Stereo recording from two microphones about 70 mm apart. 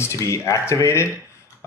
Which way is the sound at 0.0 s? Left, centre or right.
Left.